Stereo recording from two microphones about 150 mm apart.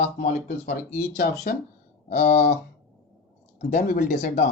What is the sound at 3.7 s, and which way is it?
Speech, 55° left (ahead or behind).